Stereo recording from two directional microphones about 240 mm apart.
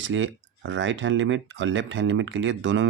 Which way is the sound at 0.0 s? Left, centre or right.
Right.